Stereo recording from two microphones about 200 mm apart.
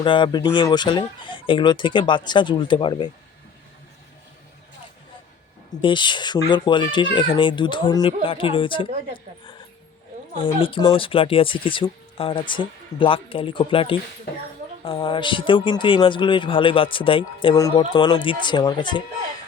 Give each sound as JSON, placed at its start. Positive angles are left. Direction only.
{"t": 0.0, "sound": "speech", "side_deg": 25}
{"t": 5.8, "sound": "speech", "side_deg": 25}
{"t": 10.3, "sound": "speech", "side_deg": 25}